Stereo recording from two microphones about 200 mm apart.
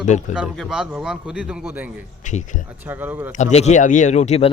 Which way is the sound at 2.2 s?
40° left (ahead or behind).